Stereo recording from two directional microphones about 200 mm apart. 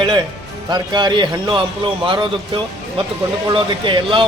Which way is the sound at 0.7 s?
20° right (ahead or behind).